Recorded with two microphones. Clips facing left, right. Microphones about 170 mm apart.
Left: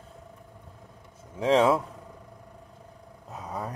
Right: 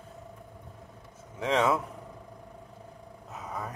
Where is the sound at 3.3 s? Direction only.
30° left (ahead or behind).